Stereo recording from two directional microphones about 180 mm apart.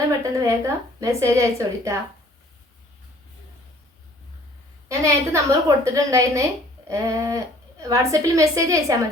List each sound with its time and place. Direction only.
0.3 s speech: 15° right (ahead or behind)
4.9 s speech: 15° right (ahead or behind)